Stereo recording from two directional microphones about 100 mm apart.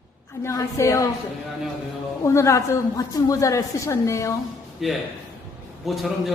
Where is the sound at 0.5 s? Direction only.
30° left (ahead or behind).